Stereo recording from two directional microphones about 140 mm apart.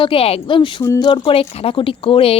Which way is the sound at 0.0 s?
40° left (ahead or behind).